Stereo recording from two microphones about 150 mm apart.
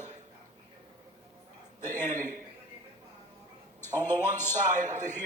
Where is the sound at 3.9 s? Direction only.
15° left (ahead or behind).